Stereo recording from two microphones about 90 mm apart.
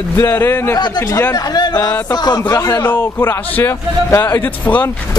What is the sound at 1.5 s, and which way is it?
Speech, 50° left (ahead or behind).